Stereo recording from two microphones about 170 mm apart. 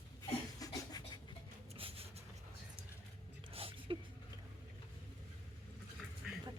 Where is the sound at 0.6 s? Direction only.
25° left (ahead or behind).